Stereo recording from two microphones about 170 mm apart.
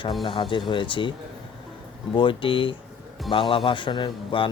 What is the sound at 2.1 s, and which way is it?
Speech, 30° left (ahead or behind).